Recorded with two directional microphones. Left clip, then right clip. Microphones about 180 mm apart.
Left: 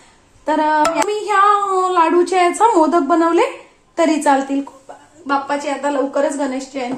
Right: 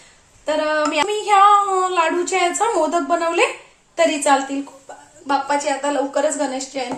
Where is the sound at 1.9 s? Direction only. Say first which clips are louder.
Left 5 dB; 40° left (ahead or behind).